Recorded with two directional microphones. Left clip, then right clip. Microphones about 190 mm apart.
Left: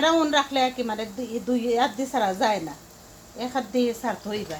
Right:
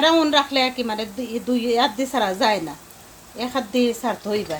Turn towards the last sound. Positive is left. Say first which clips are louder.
# right 5 dB
turn(degrees=-25)  # may be behind; listen again after turning